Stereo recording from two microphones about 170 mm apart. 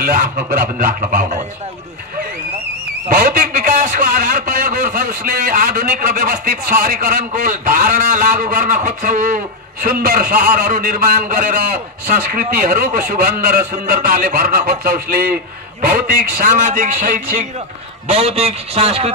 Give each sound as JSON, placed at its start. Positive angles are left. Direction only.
{"t": 0.0, "sound": "a man's voice", "side_deg": -60}
{"t": 3.1, "sound": "a man's voice", "side_deg": -55}
{"t": 18.0, "sound": "a man's voice", "side_deg": -35}